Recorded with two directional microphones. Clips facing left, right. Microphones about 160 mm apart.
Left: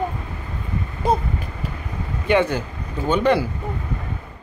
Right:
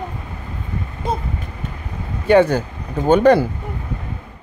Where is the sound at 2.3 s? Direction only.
40° right (ahead or behind).